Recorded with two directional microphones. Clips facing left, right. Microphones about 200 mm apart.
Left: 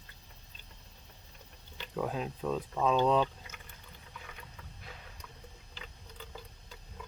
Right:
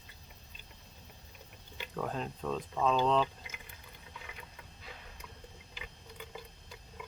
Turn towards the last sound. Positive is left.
turn(degrees=-10)  # may be behind; listen again after turning